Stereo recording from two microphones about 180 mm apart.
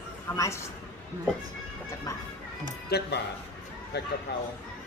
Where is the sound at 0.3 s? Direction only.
15° left (ahead or behind).